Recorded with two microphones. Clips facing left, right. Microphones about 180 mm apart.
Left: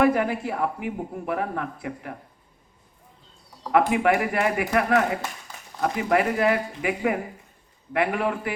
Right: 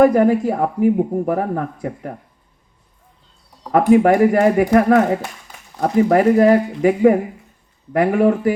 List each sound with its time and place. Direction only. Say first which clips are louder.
0.0 s speech: right 9 dB; 40° right (ahead or behind)
3.7 s speech: right 8 dB; 40° right (ahead or behind)